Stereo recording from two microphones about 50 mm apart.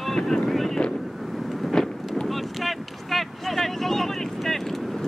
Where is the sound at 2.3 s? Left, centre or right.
Centre.